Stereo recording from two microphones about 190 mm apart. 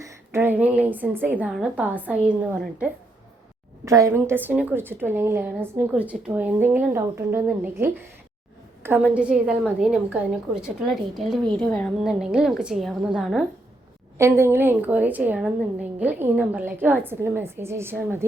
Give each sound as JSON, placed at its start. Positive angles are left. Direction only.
{"t": 0.0, "sound": "a woman's voice", "side_deg": -15}
{"t": 14.2, "sound": "a woman's voice", "side_deg": -15}